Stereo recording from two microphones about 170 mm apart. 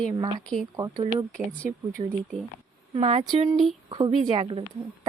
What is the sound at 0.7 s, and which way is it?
Speech, 20° right (ahead or behind).